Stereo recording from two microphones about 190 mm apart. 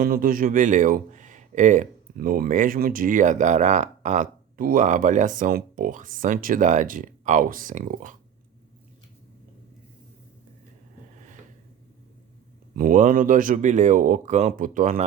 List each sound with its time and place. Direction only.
0.0 s speech: 50° right (ahead or behind)
12.7 s speech: 45° right (ahead or behind)